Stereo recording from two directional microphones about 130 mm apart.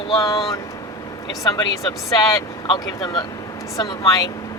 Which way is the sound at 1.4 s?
30° left (ahead or behind).